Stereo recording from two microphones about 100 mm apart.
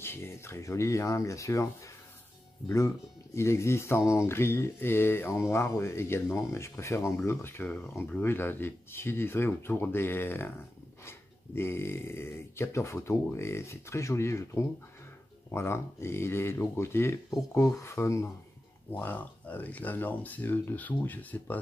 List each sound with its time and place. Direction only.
0.0 s speech: 25° left (ahead or behind)
3.3 s speech: 25° left (ahead or behind)
18.9 s speech: 20° left (ahead or behind)